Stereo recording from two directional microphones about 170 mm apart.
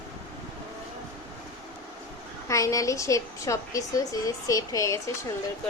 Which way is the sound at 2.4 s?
20° left (ahead or behind).